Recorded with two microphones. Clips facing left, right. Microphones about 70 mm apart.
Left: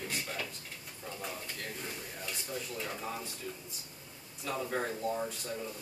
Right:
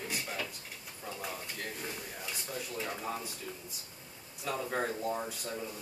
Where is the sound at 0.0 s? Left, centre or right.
Centre.